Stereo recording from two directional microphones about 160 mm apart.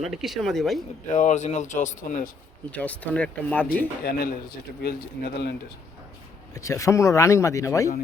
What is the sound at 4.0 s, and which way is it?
Speech, 70° left (ahead or behind).